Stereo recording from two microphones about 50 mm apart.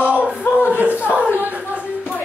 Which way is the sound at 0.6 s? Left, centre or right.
Right.